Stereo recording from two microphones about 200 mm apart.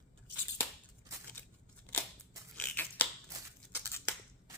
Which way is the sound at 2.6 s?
10° left (ahead or behind).